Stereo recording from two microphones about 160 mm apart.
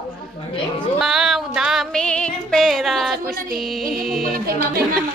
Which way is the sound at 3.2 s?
70° right (ahead or behind).